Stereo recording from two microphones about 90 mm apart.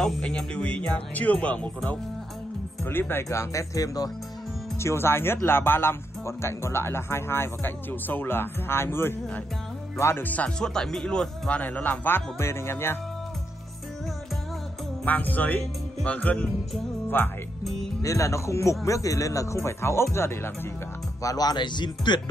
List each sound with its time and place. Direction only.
0.0 s speech: 10° left (ahead or behind)
2.8 s speech: 25° left (ahead or behind); by 4.1 s 40° left (ahead or behind)
4.7 s speech: 30° left (ahead or behind)
10.6 s speech: 5° left (ahead or behind); by 12.9 s 30° left (ahead or behind)
15.0 s speech: 20° left (ahead or behind)
18.0 s speech: 35° left (ahead or behind)
21.2 s speech: 40° left (ahead or behind)